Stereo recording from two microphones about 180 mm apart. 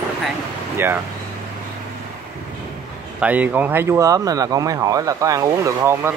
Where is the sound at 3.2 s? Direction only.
10° right (ahead or behind).